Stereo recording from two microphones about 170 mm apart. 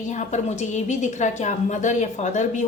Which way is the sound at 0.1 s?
40° left (ahead or behind).